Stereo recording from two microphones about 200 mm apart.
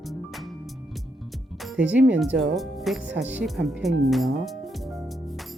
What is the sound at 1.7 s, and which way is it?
Speech, 5° right (ahead or behind).